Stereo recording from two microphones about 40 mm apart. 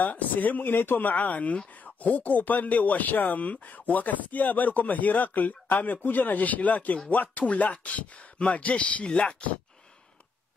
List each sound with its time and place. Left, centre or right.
0.0 s speech: left